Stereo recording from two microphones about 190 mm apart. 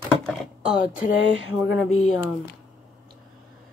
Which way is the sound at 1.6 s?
5° right (ahead or behind).